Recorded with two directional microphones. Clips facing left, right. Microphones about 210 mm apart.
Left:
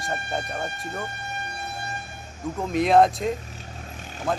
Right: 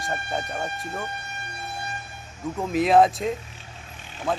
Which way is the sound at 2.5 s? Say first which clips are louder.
Even; centre (ahead or behind).